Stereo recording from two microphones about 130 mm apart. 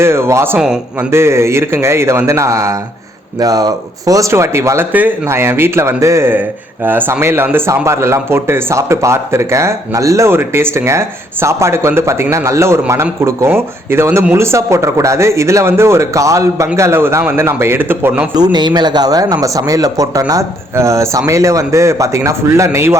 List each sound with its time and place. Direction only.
0.0 s speech: 20° right (ahead or behind)
18.3 s speech: 35° right (ahead or behind)